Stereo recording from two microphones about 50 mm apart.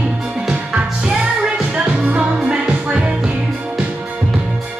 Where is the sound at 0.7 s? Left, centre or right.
Centre.